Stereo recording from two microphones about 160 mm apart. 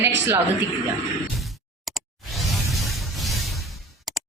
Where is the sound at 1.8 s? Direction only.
Centre (ahead or behind).